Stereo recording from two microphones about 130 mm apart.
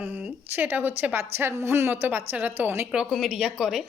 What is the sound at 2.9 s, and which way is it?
Speech, 5° right (ahead or behind).